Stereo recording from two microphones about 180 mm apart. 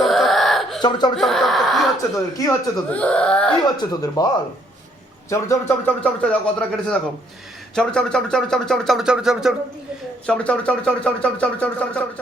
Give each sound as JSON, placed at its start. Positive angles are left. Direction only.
{"t": 0.0, "sound": "a sound", "side_deg": 0}
{"t": 0.8, "sound": "speech", "side_deg": 25}
{"t": 1.1, "sound": "speech", "side_deg": 0}
{"t": 2.4, "sound": "speech", "side_deg": 20}
{"t": 2.9, "sound": "speech", "side_deg": 5}
{"t": 3.8, "sound": "speech", "side_deg": 20}
{"t": 5.3, "sound": "speech", "side_deg": 15}